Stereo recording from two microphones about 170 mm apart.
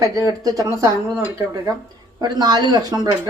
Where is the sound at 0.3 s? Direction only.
20° right (ahead or behind).